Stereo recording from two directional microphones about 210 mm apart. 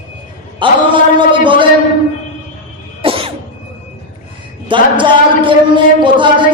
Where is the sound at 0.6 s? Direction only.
25° right (ahead or behind).